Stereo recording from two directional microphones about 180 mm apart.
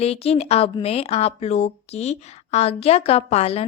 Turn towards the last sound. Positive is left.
turn(degrees=35)  # may be behind; listen again after turning